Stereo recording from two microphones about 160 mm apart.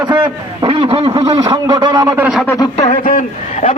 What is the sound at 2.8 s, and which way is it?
Speech, 50° left (ahead or behind).